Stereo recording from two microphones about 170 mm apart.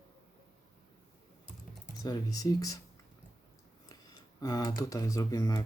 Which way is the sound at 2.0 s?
20° left (ahead or behind).